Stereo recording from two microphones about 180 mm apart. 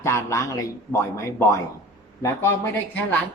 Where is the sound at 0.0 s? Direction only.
15° left (ahead or behind).